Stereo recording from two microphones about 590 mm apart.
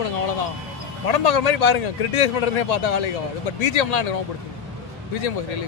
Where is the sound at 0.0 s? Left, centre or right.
Left.